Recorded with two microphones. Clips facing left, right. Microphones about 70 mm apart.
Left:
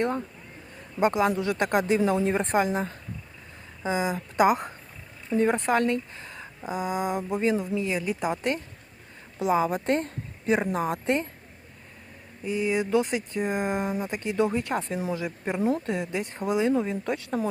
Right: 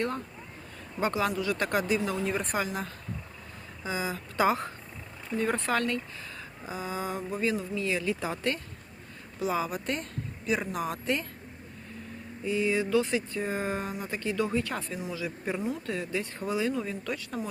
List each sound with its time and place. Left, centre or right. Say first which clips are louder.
0.9 s a woman's voice: left 5 dB; left
12.5 s a woman's voice: left 2 dB; left